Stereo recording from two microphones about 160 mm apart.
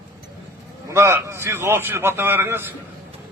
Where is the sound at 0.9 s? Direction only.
15° right (ahead or behind).